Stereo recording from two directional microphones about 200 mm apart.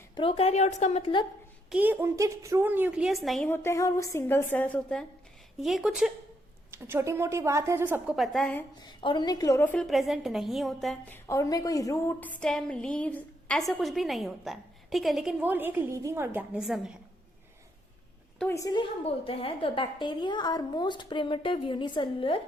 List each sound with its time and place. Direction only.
0.2 s a woman's voice: 30° left (ahead or behind)
1.7 s a woman's voice: 10° right (ahead or behind)
8.8 s a woman's voice: 25° left (ahead or behind); by 16.9 s centre (ahead or behind)
18.3 s a woman's voice: 10° left (ahead or behind)